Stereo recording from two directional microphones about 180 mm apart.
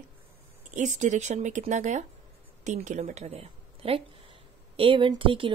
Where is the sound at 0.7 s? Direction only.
40° right (ahead or behind).